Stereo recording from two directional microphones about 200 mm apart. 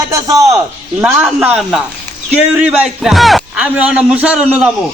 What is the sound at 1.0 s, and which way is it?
A man's voice, 5° right (ahead or behind).